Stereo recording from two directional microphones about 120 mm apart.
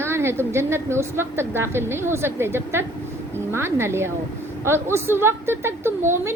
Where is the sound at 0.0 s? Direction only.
20° right (ahead or behind).